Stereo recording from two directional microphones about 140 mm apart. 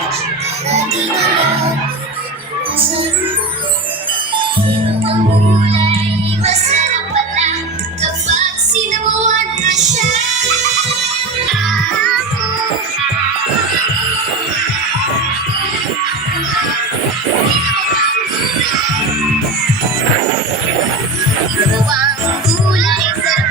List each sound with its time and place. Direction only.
5.6 s music: 45° right (ahead or behind)
8.3 s music: 60° right (ahead or behind)